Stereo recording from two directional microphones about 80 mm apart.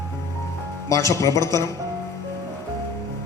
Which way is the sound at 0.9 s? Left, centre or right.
Left.